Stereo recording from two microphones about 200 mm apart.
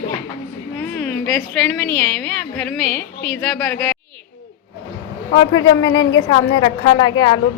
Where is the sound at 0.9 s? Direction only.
5° left (ahead or behind).